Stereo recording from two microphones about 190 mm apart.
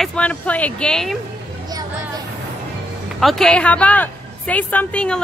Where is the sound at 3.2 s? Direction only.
Centre (ahead or behind).